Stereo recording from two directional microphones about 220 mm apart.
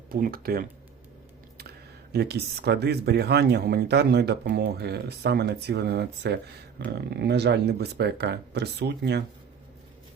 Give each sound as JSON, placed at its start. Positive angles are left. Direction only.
{"t": 0.1, "sound": "speech", "side_deg": -40}
{"t": 2.1, "sound": "speech", "side_deg": -45}